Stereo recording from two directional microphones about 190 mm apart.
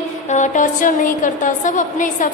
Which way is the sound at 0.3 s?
40° left (ahead or behind).